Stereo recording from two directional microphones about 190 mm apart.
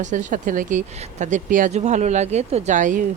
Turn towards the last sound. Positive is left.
turn(degrees=-40)  # may be behind; listen again after turning